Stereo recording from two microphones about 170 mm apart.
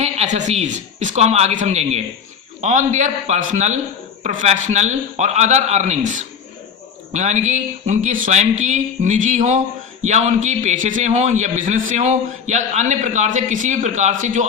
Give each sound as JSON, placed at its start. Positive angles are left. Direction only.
{"t": 0.0, "sound": "a man's voice", "side_deg": -40}